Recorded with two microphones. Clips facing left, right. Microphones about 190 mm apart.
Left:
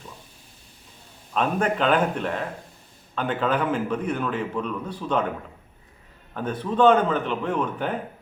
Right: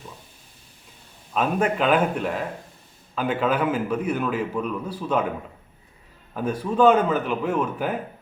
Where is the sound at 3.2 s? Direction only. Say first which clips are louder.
Right 1 dB; 5° right (ahead or behind).